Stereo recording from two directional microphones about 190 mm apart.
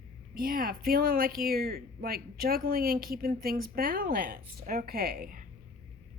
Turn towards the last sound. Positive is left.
turn(degrees=-50)  # may be behind; listen again after turning